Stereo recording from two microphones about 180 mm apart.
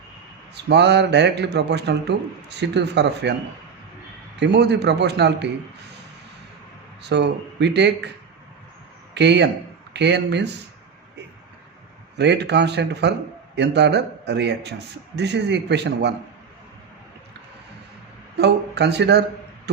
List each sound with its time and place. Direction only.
0.5 s a man's voice: 70° right (ahead or behind)
4.4 s a man's voice: 70° right (ahead or behind)
7.0 s a man's voice: 70° right (ahead or behind)
9.1 s a man's voice: 70° right (ahead or behind)
12.1 s a man's voice: 75° right (ahead or behind)
18.3 s speech: 70° right (ahead or behind)